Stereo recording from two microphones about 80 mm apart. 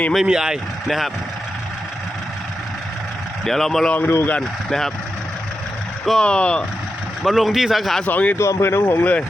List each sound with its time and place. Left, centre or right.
0.1 s speech: centre
3.4 s speech: centre
6.1 s speech: centre
7.2 s speech: centre
8.0 s speech: left
8.4 s speech: left